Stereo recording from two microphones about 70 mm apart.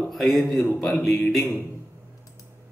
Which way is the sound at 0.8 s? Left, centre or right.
Centre.